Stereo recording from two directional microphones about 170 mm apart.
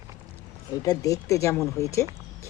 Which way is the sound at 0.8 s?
20° left (ahead or behind).